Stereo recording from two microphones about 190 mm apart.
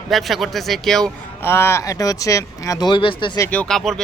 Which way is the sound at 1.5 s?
15° left (ahead or behind).